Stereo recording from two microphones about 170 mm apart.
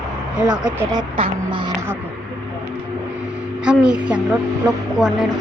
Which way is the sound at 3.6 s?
5° right (ahead or behind).